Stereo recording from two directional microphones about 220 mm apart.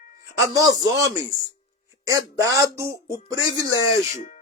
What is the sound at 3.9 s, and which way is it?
Speech, 30° left (ahead or behind).